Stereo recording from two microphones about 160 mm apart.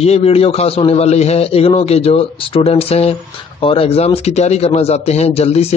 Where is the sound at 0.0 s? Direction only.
40° left (ahead or behind).